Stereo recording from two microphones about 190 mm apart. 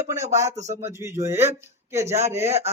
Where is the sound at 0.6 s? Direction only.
35° right (ahead or behind).